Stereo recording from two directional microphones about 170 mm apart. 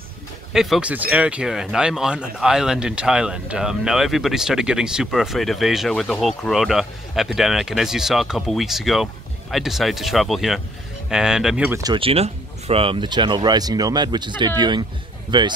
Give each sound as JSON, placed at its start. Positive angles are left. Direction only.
{"t": 0.5, "sound": "speech", "side_deg": 0}
{"t": 11.8, "sound": "speech", "side_deg": -30}